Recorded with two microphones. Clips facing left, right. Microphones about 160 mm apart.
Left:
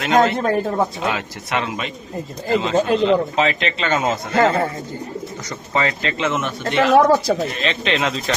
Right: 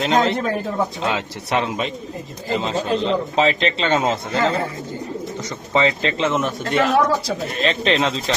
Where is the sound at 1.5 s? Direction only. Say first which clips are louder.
Right 2 dB; 30° right (ahead or behind).